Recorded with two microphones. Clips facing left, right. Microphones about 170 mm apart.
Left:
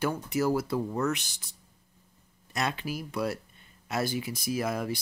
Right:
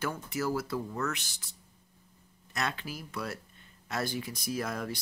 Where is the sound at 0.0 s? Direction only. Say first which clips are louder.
Left 5 dB; 15° left (ahead or behind).